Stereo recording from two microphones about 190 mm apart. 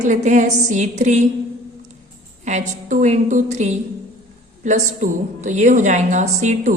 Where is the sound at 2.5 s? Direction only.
40° right (ahead or behind).